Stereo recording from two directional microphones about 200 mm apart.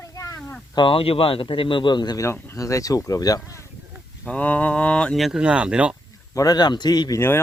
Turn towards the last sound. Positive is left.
turn(degrees=15)  # may be behind; listen again after turning